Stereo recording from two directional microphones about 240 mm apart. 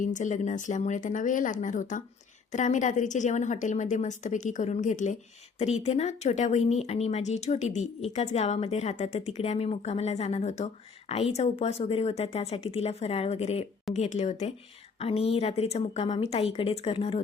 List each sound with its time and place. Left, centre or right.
0.0 s a woman's voice: left